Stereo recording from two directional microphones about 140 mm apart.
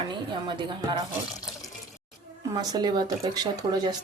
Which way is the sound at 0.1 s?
35° right (ahead or behind).